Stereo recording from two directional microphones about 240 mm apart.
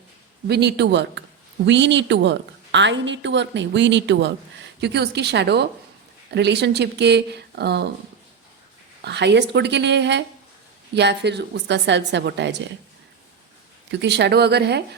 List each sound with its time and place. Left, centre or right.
0.4 s a woman's voice: right
9.0 s a woman's voice: right
14.0 s a woman's voice: right